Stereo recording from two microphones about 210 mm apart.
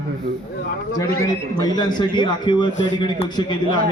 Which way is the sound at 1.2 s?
20° left (ahead or behind).